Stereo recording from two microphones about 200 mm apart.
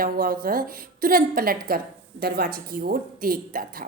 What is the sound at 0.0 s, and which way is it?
A woman's voice, 45° right (ahead or behind).